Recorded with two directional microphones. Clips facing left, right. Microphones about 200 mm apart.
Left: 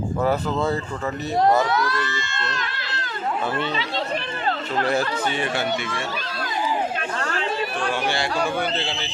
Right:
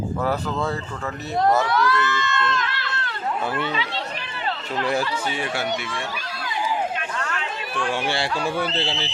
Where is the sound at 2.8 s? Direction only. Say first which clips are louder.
Right 1 dB; 65° right (ahead or behind).